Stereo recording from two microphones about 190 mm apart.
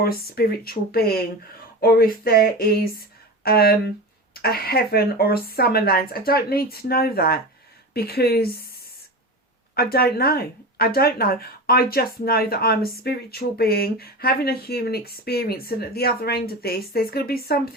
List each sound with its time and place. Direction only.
0.0 s speech: 55° left (ahead or behind)
9.7 s speech: 55° left (ahead or behind)